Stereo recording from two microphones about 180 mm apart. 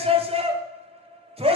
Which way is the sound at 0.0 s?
30° right (ahead or behind).